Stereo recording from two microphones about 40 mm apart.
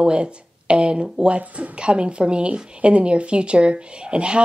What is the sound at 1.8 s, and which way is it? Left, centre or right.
A woman's voice, right.